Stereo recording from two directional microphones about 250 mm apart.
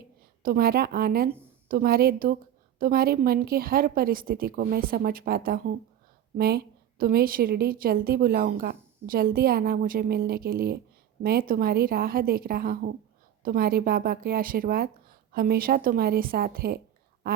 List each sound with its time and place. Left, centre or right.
0.4 s a woman's voice: right